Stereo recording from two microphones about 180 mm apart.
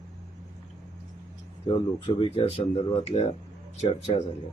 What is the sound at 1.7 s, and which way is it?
Speech, 25° left (ahead or behind).